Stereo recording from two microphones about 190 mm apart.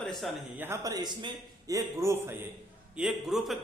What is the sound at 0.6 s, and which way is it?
Speech, 15° right (ahead or behind).